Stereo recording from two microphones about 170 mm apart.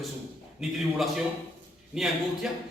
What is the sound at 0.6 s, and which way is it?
Speech, centre (ahead or behind).